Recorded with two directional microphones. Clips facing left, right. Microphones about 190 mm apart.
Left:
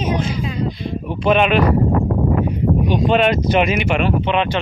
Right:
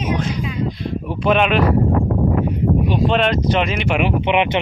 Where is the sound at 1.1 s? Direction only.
Centre (ahead or behind).